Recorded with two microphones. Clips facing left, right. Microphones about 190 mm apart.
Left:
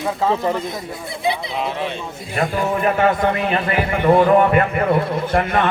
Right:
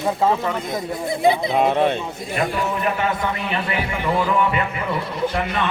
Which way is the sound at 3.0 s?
55° left (ahead or behind).